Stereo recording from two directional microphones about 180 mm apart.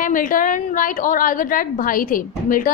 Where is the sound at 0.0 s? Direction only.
50° left (ahead or behind).